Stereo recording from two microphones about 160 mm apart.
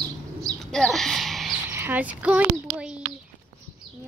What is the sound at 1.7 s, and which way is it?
Speech, 15° right (ahead or behind).